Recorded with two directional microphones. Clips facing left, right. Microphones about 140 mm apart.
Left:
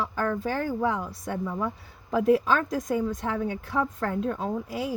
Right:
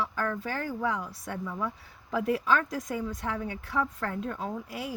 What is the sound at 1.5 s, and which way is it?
Speech, 40° left (ahead or behind).